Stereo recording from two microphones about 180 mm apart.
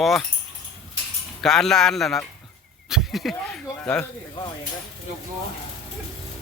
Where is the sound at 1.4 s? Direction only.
5° left (ahead or behind).